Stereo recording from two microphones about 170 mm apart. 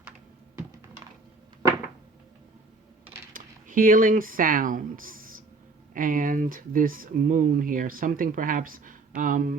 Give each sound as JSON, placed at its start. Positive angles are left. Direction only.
{"t": 3.3, "sound": "speech", "side_deg": -55}